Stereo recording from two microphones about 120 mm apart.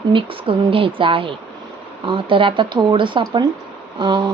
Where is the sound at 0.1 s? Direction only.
45° right (ahead or behind).